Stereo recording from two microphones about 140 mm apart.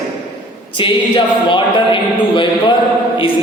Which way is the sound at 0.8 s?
35° left (ahead or behind).